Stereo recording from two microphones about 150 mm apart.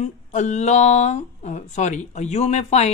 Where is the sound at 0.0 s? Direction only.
50° left (ahead or behind).